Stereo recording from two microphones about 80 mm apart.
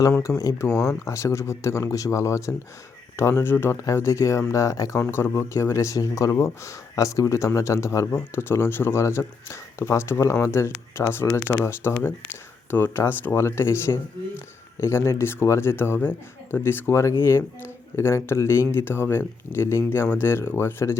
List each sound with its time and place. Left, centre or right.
0.2 s speech: left
8.1 s speech: left